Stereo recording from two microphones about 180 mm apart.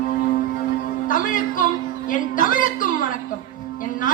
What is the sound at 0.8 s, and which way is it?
Music, 50° left (ahead or behind).